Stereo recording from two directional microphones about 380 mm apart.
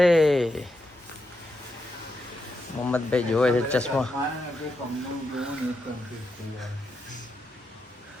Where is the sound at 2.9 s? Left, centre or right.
Centre.